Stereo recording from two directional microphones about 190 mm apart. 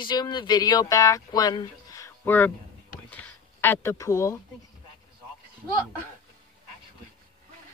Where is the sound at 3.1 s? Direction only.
10° left (ahead or behind).